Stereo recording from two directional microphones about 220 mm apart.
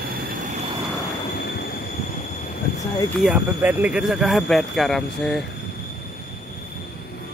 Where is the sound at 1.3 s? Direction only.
45° left (ahead or behind).